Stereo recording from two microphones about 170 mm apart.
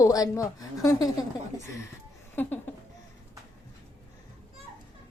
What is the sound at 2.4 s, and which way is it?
Laughter, 10° left (ahead or behind).